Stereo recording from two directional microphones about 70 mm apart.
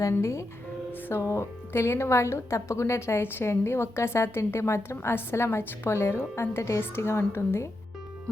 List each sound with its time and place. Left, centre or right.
0.1 s a woman's voice: left